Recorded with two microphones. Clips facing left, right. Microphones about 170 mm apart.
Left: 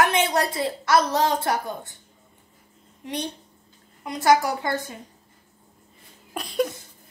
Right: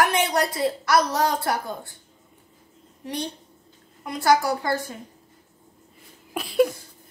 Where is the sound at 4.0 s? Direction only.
20° left (ahead or behind).